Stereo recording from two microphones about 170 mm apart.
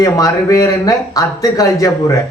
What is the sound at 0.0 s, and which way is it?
A man's voice, 20° left (ahead or behind).